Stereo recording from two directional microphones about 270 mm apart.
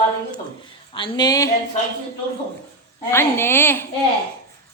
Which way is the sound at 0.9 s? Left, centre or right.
Centre.